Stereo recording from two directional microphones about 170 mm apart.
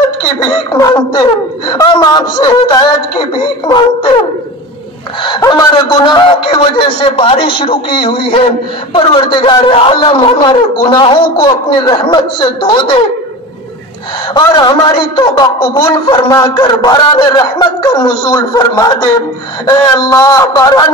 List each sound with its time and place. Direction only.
0.4 s a man's voice: 20° left (ahead or behind)
5.2 s a man's voice: 25° left (ahead or behind)
14.3 s a man's voice: 25° left (ahead or behind)